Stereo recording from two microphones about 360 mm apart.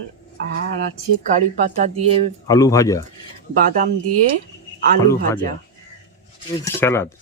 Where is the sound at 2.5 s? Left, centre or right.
Centre.